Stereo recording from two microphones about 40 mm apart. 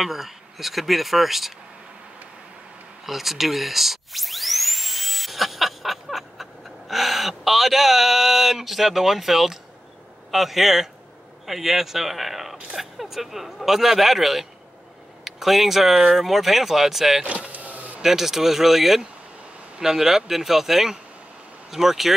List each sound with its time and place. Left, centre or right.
0.0 s speech: centre
3.1 s dental drill: centre
10.3 s speech: centre
17.2 s vehicle: right
18.0 s speech: centre